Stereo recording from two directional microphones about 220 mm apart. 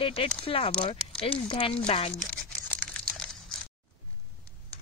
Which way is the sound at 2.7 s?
5° left (ahead or behind).